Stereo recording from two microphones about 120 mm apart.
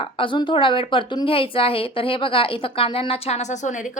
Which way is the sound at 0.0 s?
45° left (ahead or behind).